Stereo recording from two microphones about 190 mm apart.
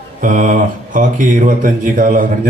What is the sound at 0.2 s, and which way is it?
A man's voice, 45° right (ahead or behind).